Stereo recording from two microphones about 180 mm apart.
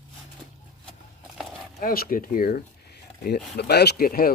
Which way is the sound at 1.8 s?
55° left (ahead or behind).